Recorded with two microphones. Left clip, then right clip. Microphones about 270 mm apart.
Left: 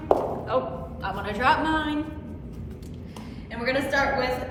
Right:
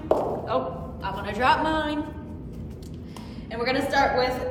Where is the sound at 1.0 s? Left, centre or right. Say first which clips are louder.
Even; centre.